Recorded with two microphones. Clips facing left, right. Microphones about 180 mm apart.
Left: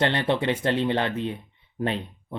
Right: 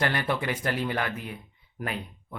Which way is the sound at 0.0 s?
25° left (ahead or behind).